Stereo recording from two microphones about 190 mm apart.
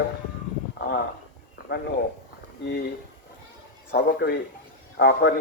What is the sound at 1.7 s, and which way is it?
Speech, 55° left (ahead or behind).